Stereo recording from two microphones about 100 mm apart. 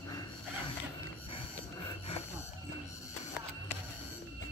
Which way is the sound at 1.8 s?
90° left.